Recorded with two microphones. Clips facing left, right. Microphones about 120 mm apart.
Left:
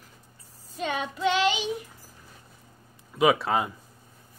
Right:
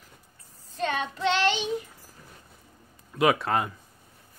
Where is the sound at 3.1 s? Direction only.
Centre (ahead or behind).